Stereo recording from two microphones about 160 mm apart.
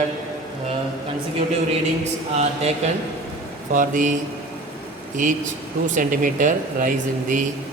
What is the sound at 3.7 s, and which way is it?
Speech, 55° right (ahead or behind).